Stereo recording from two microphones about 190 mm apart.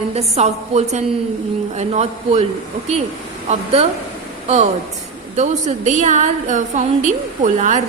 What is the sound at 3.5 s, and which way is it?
Speech, 35° right (ahead or behind).